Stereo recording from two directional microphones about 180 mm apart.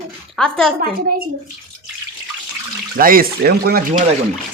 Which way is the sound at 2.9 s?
55° right (ahead or behind).